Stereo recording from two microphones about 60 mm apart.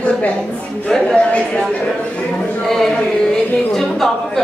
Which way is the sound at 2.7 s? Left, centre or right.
Centre.